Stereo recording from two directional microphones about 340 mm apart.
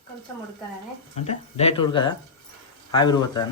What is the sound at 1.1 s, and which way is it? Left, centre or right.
Speech, centre.